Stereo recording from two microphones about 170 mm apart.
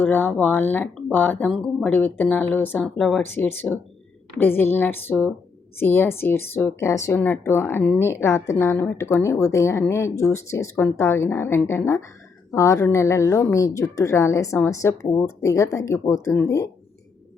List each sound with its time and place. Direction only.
0.0 s speech: 10° left (ahead or behind)